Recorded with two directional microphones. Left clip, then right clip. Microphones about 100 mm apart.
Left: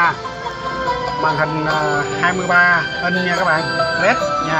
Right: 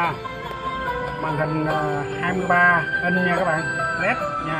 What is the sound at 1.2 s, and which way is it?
Speech, 5° left (ahead or behind).